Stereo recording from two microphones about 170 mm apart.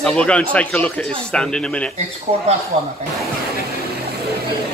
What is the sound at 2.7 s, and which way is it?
Speech, 40° right (ahead or behind).